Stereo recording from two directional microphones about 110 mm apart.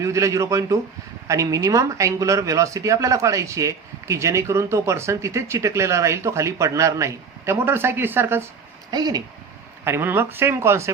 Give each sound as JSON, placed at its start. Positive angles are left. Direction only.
{"t": 0.0, "sound": "speech", "side_deg": -30}
{"t": 8.9, "sound": "speech", "side_deg": -35}
{"t": 9.8, "sound": "speech", "side_deg": -20}